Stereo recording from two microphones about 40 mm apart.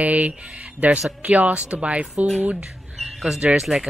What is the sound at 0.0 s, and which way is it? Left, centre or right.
Speech, right.